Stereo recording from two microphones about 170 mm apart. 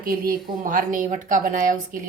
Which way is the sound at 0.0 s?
60° right (ahead or behind).